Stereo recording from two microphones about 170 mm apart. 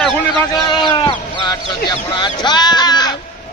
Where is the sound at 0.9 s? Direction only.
25° left (ahead or behind).